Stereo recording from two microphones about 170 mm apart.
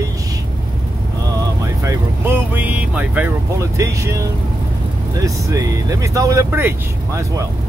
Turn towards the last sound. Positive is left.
turn(degrees=-15)  # may be behind; listen again after turning